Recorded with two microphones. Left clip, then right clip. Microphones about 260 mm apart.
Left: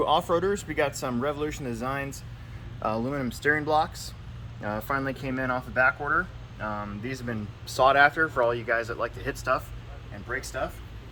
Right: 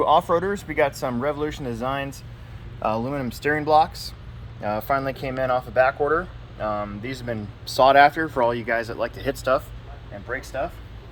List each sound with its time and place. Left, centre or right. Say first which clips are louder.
0.0 s speech: right 5 dB; right